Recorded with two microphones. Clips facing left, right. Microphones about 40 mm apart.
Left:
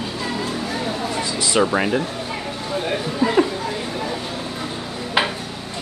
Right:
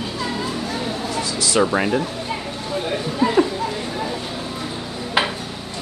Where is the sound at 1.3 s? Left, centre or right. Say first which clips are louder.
Even; left.